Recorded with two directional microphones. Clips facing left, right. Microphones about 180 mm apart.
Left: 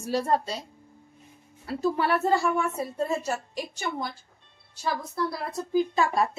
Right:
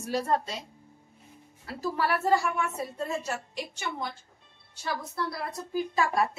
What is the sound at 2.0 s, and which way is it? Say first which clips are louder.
A woman's voice: right 1 dB; 25° left (ahead or behind).